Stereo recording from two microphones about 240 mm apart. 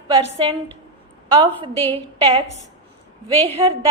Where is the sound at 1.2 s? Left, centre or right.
Right.